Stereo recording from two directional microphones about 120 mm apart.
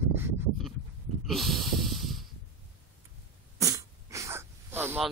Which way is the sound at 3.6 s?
25° right (ahead or behind).